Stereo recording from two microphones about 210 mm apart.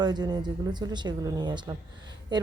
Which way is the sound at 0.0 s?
20° right (ahead or behind).